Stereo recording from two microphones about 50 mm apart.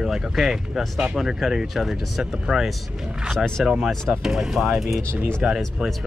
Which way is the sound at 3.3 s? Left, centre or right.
Centre.